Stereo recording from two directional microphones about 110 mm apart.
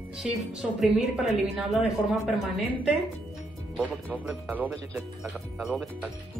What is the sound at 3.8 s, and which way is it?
Speech, 15° right (ahead or behind).